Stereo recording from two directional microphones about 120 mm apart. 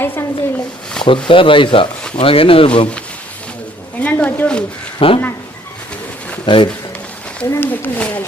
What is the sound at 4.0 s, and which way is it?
Speech, 15° left (ahead or behind).